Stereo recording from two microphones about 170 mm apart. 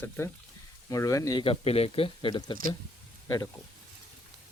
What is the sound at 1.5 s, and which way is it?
Speech, 35° left (ahead or behind).